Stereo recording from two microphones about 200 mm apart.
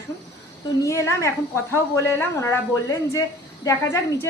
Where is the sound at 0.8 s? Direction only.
15° left (ahead or behind).